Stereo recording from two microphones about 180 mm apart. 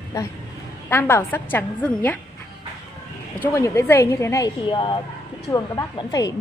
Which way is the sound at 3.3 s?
15° left (ahead or behind).